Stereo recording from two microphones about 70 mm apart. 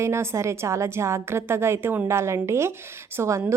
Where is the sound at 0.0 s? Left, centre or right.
Right.